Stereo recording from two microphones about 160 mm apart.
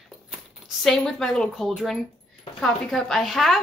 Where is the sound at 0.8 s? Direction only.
Centre (ahead or behind).